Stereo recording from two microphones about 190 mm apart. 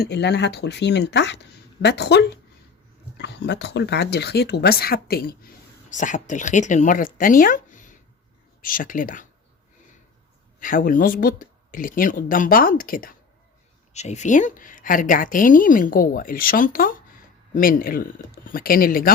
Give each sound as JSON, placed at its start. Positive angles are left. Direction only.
{"t": 0.0, "sound": "speech", "side_deg": 60}
{"t": 5.9, "sound": "a woman's voice", "side_deg": 40}
{"t": 10.6, "sound": "a woman's voice", "side_deg": 45}
{"t": 13.9, "sound": "a woman's voice", "side_deg": 35}